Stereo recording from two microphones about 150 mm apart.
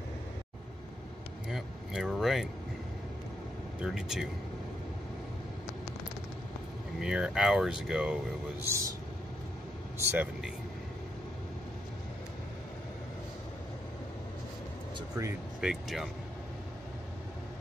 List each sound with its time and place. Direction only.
1.5 s speech: 5° right (ahead or behind)
3.8 s speech: 5° right (ahead or behind)
7.0 s speech: 5° right (ahead or behind)
8.6 s speech: 20° right (ahead or behind)
9.9 s speech: 10° right (ahead or behind)
15.6 s speech: centre (ahead or behind)